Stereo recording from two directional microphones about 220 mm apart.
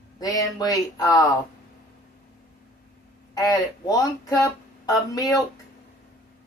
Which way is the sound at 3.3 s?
15° left (ahead or behind).